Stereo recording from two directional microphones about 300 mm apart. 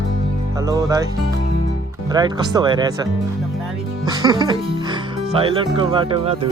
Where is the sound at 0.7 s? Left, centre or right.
Centre.